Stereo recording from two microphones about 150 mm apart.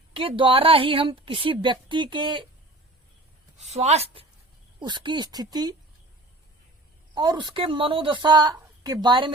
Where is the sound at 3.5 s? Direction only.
50° right (ahead or behind).